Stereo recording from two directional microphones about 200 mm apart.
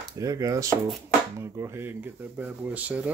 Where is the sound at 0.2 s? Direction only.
15° right (ahead or behind).